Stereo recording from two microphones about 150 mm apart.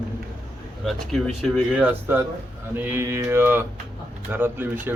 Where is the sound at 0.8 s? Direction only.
Centre (ahead or behind).